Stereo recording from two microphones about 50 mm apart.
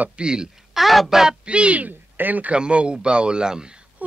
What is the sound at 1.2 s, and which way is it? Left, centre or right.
Speech, centre.